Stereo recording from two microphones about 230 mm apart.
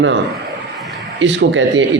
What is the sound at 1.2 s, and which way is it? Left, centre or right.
Speech, right.